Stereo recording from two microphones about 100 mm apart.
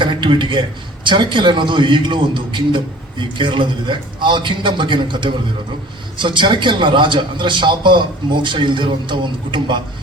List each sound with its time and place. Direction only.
0.0 s a man's voice: 55° right (ahead or behind)